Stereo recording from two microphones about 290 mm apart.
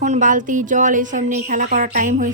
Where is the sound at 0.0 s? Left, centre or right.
Right.